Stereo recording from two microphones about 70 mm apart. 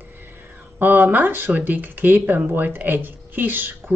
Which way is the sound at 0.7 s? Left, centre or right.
Right.